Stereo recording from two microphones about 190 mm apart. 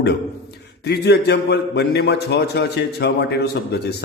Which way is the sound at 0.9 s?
60° left (ahead or behind).